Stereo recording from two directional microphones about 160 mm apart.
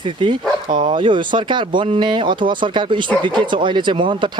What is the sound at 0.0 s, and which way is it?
Speech, 30° right (ahead or behind).